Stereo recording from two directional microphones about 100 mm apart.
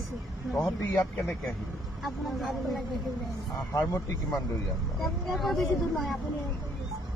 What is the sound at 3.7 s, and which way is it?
Speech, 30° left (ahead or behind).